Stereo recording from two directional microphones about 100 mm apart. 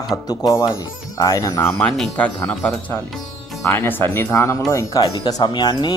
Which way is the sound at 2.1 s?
15° left (ahead or behind).